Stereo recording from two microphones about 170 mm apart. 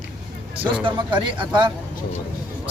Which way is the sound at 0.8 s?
30° right (ahead or behind).